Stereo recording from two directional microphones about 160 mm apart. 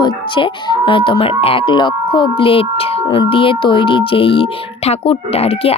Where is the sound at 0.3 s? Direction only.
30° left (ahead or behind).